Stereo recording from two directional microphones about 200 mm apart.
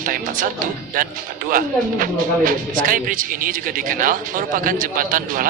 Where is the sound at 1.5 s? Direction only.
45° right (ahead or behind).